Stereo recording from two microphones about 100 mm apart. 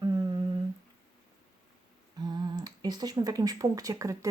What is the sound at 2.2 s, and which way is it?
Speech, 40° right (ahead or behind).